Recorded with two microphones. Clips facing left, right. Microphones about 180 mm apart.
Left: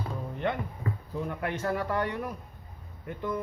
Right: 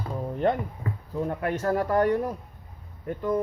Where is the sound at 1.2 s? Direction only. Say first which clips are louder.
Right 5 dB; 40° right (ahead or behind).